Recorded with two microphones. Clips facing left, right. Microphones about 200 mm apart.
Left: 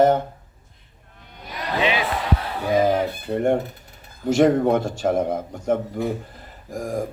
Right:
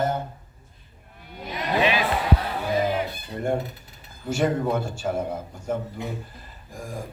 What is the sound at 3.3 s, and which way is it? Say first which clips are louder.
Coin: left 10 dB; 55° left (ahead or behind).